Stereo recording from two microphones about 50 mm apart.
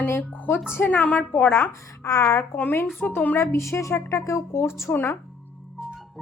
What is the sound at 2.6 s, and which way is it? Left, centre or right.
Speech, left.